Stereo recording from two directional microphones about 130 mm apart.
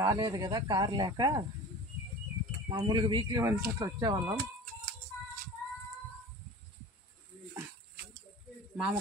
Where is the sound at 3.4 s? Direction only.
25° right (ahead or behind).